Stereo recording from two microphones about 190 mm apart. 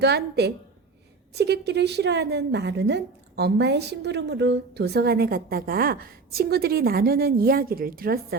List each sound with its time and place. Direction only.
0.0 s a woman's voice: 60° right (ahead or behind)